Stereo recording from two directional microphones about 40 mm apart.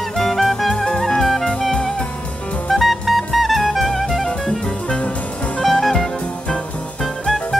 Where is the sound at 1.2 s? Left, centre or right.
Centre.